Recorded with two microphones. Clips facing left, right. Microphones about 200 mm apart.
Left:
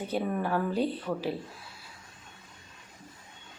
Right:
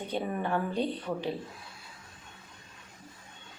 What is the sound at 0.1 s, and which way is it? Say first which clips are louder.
A woman's voice: left 1 dB; centre (ahead or behind).